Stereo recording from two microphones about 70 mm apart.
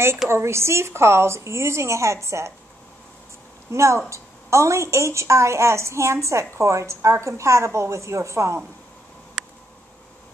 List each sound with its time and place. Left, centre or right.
0.3 s a woman's voice: right
3.7 s a woman's voice: right